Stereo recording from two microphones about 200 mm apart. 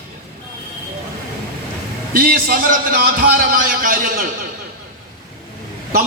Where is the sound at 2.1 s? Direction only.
45° right (ahead or behind).